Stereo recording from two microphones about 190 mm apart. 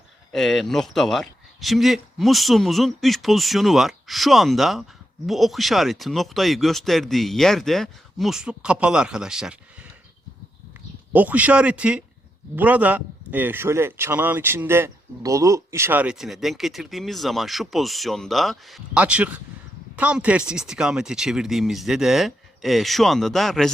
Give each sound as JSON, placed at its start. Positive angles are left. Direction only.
{"t": 0.3, "sound": "speech", "side_deg": 0}
{"t": 11.1, "sound": "a man's voice", "side_deg": -10}